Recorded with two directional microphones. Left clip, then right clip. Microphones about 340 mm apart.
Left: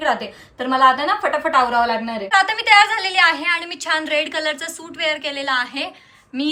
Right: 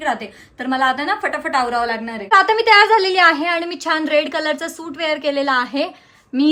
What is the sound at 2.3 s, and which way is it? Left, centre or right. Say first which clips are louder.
A woman's voice: right 2 dB; right.